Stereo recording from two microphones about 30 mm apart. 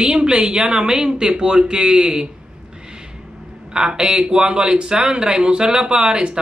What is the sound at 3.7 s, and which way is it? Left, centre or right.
Speech, right.